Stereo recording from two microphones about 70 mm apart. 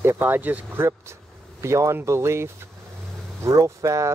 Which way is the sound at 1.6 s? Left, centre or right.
Right.